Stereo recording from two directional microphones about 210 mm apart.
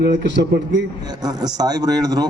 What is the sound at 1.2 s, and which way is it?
Speech, 20° right (ahead or behind).